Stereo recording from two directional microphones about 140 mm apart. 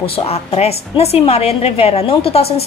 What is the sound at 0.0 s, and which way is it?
A woman's voice, 40° left (ahead or behind).